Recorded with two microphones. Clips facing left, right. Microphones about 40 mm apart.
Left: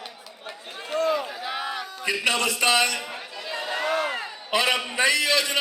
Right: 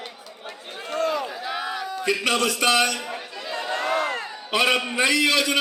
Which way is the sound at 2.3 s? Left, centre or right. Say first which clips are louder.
Right 2 dB; left.